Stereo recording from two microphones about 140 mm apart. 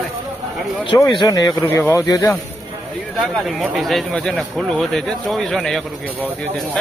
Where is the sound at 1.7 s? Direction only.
20° left (ahead or behind).